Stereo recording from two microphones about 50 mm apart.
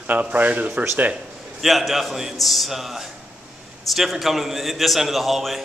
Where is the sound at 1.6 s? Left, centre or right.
Centre.